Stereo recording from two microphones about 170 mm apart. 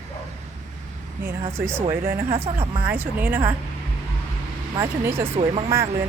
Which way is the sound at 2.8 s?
10° right (ahead or behind).